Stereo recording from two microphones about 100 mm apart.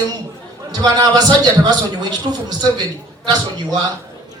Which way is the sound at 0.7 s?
45° right (ahead or behind).